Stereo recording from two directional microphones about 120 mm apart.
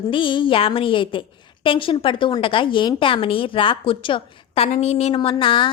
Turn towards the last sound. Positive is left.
turn(degrees=45)  # may be behind; listen again after turning